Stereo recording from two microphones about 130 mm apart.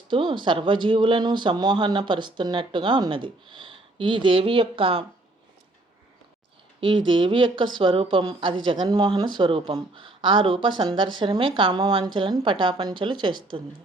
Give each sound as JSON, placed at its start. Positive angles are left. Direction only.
{"t": 0.1, "sound": "speech", "side_deg": -40}
{"t": 6.7, "sound": "speech", "side_deg": -40}